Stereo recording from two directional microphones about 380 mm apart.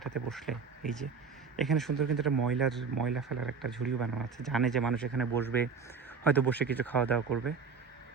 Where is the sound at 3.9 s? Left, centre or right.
Right.